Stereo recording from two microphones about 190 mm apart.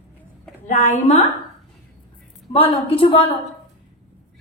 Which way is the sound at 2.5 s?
30° left (ahead or behind).